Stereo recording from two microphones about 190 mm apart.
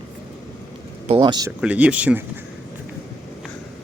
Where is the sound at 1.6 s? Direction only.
5° right (ahead or behind).